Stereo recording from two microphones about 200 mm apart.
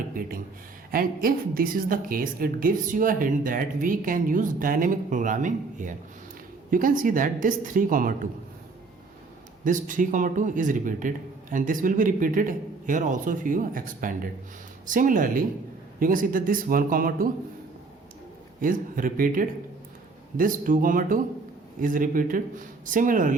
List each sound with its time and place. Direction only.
0.1 s a sound: 45° right (ahead or behind)
0.9 s a woman's voice: 45° right (ahead or behind)
9.6 s a man's voice: 40° right (ahead or behind)
18.6 s a woman's voice: 45° right (ahead or behind)